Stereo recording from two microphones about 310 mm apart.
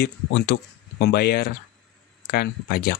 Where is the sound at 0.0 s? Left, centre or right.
Left.